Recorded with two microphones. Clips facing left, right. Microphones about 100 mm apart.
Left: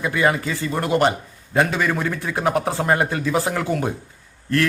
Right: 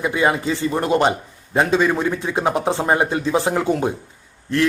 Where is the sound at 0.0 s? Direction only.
20° right (ahead or behind).